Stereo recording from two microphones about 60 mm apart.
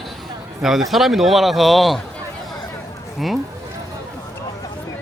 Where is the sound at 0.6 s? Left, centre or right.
Centre.